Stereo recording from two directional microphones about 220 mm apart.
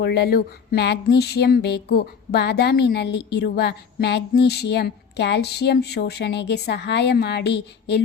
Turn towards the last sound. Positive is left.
turn(degrees=50)  # may be behind; listen again after turning